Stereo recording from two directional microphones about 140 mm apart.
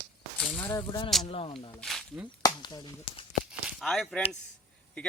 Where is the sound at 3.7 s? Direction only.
5° left (ahead or behind).